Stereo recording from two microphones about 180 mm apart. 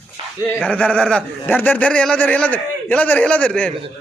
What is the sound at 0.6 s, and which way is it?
A man's voice, 5° left (ahead or behind).